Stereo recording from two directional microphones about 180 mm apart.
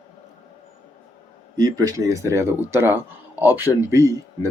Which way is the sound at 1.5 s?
20° right (ahead or behind).